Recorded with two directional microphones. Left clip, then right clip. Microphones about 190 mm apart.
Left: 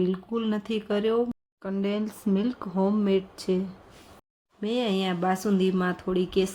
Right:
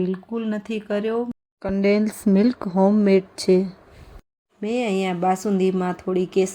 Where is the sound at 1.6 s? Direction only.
25° right (ahead or behind).